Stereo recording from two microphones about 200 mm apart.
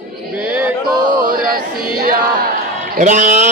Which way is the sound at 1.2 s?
45° right (ahead or behind).